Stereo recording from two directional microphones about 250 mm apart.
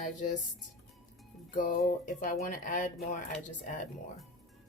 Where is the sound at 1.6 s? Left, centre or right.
Left.